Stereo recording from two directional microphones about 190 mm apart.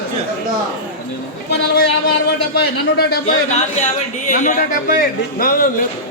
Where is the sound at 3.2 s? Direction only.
35° left (ahead or behind).